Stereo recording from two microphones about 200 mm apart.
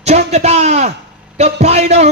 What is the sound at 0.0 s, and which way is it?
A man's voice, 35° right (ahead or behind).